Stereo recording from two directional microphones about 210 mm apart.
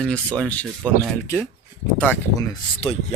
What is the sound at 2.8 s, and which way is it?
Speech, 25° left (ahead or behind).